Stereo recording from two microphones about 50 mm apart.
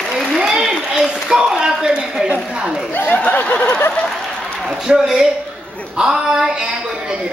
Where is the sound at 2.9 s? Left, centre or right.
Left.